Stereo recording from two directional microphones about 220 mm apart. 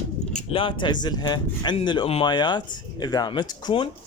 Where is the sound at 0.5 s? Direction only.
20° left (ahead or behind).